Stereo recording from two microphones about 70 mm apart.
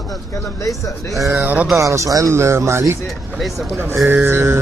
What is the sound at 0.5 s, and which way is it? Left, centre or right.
Speech, left.